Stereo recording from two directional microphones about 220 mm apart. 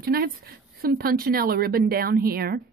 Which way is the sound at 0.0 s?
40° right (ahead or behind).